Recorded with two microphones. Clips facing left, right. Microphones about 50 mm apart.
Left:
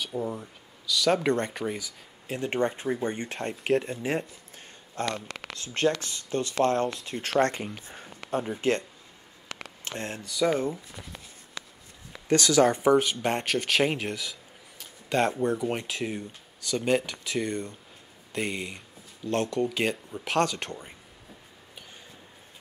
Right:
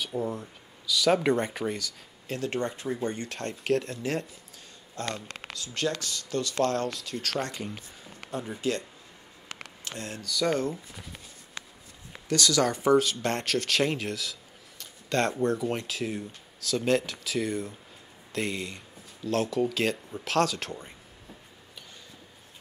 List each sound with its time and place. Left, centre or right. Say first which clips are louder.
0.0 s speech: even; centre
1.8 s speech: right 2 dB; centre
2.5 s speech: left 7 dB; left
4.9 s speech: left 3 dB; left
7.3 s speech: left 11 dB; left
9.8 s speech: left 2 dB; left
10.4 s speech: left 2 dB; centre
10.9 s speech: left 1 dB; centre
11.6 s a sound: left 1 dB; right
12.3 s speech: left 4 dB; left; by 19.7 s centre
19.7 s speech: even; centre